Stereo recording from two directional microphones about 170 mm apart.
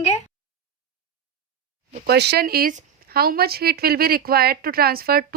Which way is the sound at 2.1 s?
75° right (ahead or behind).